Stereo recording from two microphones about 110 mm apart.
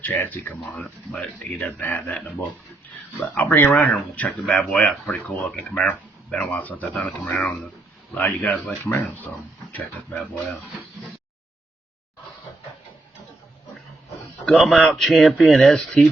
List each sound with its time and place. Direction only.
0.0 s speech: 15° left (ahead or behind)
1.6 s speech: 15° left (ahead or behind)
3.3 s speech: 15° left (ahead or behind)
4.3 s speech: 5° left (ahead or behind); by 9.3 s 20° left (ahead or behind)
14.4 s speech: centre (ahead or behind)